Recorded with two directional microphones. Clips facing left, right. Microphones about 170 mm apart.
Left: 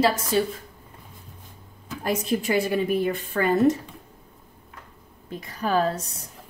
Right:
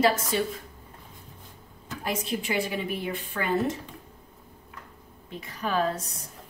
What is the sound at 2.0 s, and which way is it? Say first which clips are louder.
A woman's voice: left 6 dB; 45° left (ahead or behind).